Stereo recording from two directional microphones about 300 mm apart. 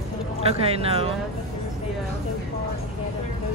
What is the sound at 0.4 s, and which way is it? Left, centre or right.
Speech, centre.